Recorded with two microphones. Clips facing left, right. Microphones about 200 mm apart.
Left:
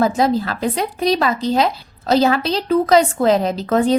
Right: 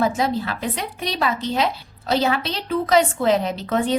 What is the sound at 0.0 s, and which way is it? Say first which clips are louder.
A woman's voice: left 5 dB; 40° left (ahead or behind).